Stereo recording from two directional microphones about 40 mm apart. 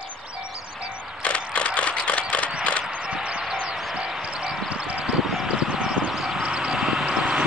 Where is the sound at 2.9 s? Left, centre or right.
Right.